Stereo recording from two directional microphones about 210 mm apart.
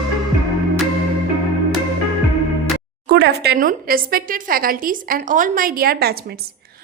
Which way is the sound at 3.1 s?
50° right (ahead or behind).